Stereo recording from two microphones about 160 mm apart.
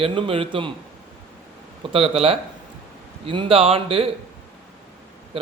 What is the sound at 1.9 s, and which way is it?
A man's voice, 35° right (ahead or behind).